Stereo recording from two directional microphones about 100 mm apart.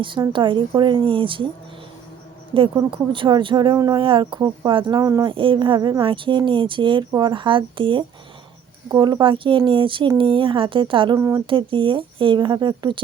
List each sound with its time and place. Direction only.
0.0 s speech: 55° right (ahead or behind)
2.5 s speech: 55° right (ahead or behind)
4.9 s speech: 35° right (ahead or behind)
5.2 s speech: 60° right (ahead or behind)
8.9 s speech: 40° right (ahead or behind)
11.2 s speech: 30° right (ahead or behind)
11.4 s speech: 55° right (ahead or behind)